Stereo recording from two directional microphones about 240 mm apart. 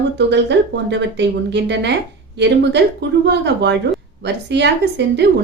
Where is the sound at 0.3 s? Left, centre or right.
Right.